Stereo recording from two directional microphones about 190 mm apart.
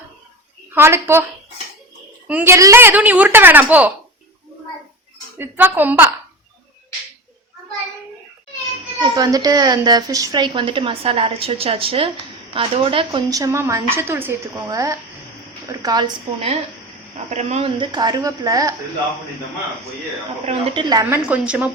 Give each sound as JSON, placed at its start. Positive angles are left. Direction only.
{"t": 0.7, "sound": "a woman's voice", "side_deg": -15}
{"t": 2.2, "sound": "a woman's voice", "side_deg": -10}
{"t": 5.4, "sound": "a woman's voice", "side_deg": -10}
{"t": 9.0, "sound": "a woman's voice", "side_deg": -20}
{"t": 13.1, "sound": "a woman's voice", "side_deg": -15}
{"t": 17.3, "sound": "a woman's voice", "side_deg": -35}
{"t": 20.4, "sound": "speech", "side_deg": -30}
{"t": 20.9, "sound": "a woman's voice", "side_deg": -15}